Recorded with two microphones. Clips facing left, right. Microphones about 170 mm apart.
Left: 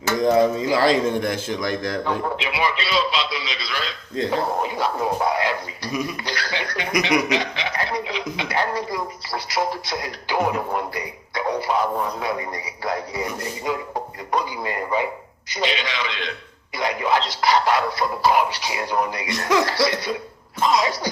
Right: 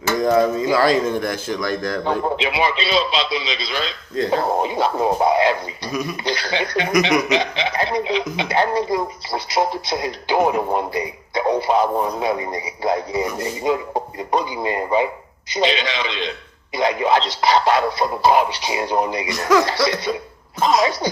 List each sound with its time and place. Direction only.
0.2 s a man's voice: 25° left (ahead or behind)
2.0 s a woman's voice: 25° right (ahead or behind)
19.3 s a man's voice: 20° left (ahead or behind)
19.6 s a woman's voice: 20° right (ahead or behind)